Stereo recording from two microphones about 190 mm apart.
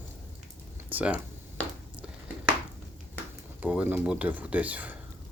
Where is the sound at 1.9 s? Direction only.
5° right (ahead or behind).